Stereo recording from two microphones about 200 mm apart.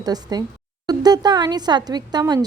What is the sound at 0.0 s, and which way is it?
Speech, 20° right (ahead or behind).